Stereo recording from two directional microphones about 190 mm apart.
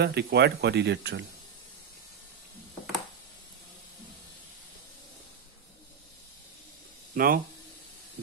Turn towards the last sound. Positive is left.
turn(degrees=-50)  # may be behind; listen again after turning